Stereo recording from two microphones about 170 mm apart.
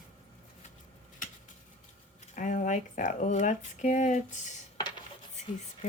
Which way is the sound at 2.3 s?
50° left (ahead or behind).